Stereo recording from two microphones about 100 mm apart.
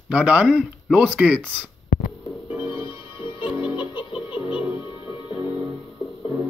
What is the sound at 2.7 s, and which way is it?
Music, 60° left (ahead or behind).